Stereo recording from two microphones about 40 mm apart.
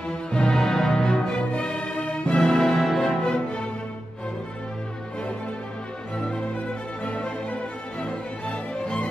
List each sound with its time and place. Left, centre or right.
0.3 s music: left
0.6 s music: centre
2.5 s music: centre
3.1 s music: left
7.1 s music: left